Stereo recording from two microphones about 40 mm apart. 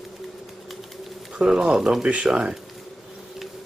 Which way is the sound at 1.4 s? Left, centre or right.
Centre.